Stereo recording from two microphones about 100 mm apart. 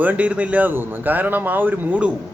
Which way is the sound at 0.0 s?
15° right (ahead or behind).